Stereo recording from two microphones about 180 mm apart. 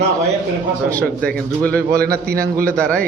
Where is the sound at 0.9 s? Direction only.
10° left (ahead or behind).